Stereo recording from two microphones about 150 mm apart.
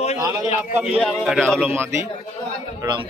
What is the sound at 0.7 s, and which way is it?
Speech, 10° right (ahead or behind).